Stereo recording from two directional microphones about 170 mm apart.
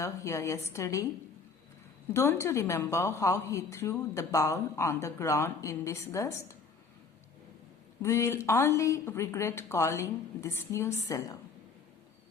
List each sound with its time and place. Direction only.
0.0 s a woman's voice: 20° left (ahead or behind)
2.1 s a woman's voice: 15° left (ahead or behind)
8.0 s a woman's voice: 15° left (ahead or behind)